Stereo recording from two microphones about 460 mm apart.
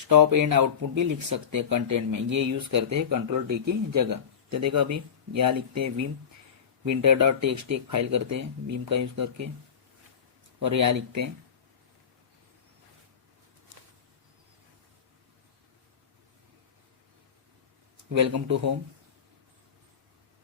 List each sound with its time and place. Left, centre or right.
0.1 s speech: right
10.7 s speech: right
18.1 s speech: right